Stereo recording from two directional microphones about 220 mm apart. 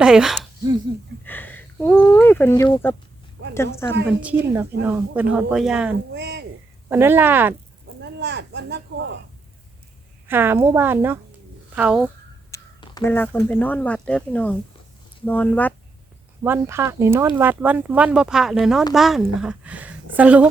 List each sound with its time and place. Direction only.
0.0 s speech: 5° right (ahead or behind)
1.2 s speech: 10° left (ahead or behind)
4.2 s speech: 5° right (ahead or behind)
6.1 s speech: 50° right (ahead or behind)
6.8 s speech: 10° right (ahead or behind)
8.0 s speech: 50° right (ahead or behind)
10.2 s speech: 10° right (ahead or behind)
12.5 s speech: 15° left (ahead or behind)
16.4 s speech: 10° right (ahead or behind)